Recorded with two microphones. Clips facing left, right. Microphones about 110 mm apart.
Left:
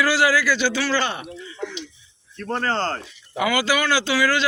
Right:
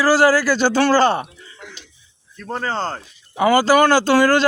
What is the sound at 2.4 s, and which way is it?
Speech, 5° right (ahead or behind).